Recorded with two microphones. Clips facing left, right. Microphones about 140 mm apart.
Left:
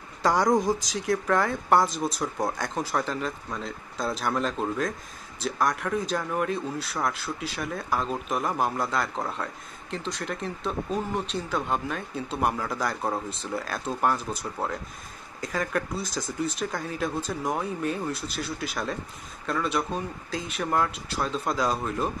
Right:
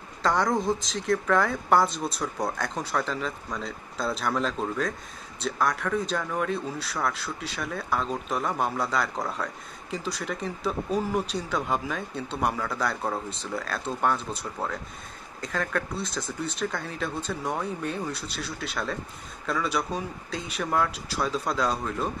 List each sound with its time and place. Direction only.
0.6 s speech: 25° right (ahead or behind)
1.0 s speech: centre (ahead or behind)